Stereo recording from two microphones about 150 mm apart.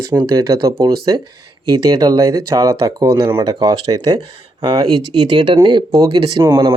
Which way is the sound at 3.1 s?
35° right (ahead or behind).